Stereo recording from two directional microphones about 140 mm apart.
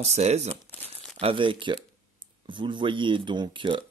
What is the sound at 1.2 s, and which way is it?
Speech, 40° right (ahead or behind).